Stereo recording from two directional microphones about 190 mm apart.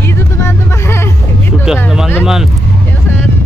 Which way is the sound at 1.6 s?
5° right (ahead or behind).